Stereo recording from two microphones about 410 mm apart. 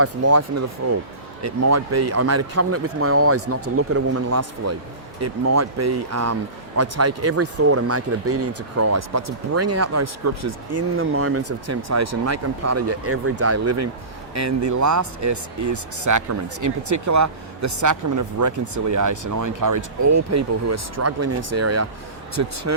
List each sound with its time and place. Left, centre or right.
0.0 s speech: right